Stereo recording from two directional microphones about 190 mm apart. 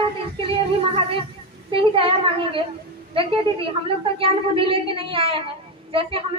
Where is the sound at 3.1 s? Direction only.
30° right (ahead or behind).